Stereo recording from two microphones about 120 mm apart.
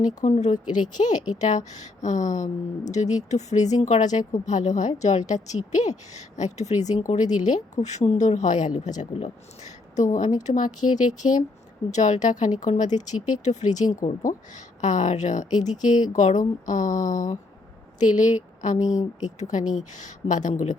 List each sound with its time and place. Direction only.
0.2 s a woman's voice: 75° left (ahead or behind)
7.1 s a woman's voice: 90° left
11.9 s a woman's voice: 75° left (ahead or behind)